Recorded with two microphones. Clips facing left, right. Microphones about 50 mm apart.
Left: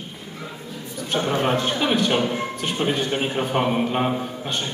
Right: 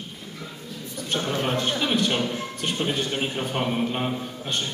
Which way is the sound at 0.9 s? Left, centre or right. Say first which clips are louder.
Left 4 dB; centre.